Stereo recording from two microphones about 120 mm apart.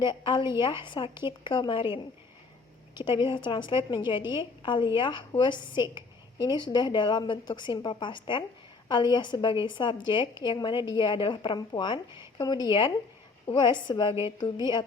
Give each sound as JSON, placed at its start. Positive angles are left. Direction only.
{"t": 0.0, "sound": "a woman's voice", "side_deg": 40}